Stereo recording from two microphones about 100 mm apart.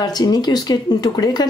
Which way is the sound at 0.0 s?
40° left (ahead or behind).